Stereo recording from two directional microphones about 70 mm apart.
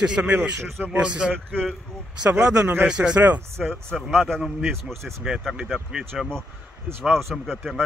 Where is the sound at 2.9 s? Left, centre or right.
Centre.